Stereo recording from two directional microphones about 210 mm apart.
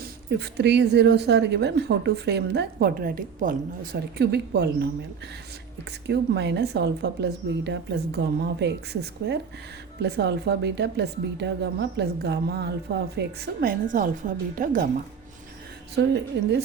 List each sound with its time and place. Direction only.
0.0 s a woman's voice: 50° right (ahead or behind)
4.2 s a woman's voice: 50° right (ahead or behind)
6.1 s a woman's voice: 55° right (ahead or behind)
16.3 s a woman's voice: 55° right (ahead or behind)